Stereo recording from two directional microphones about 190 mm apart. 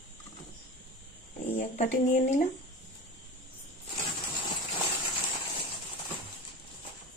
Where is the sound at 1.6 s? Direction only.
40° left (ahead or behind).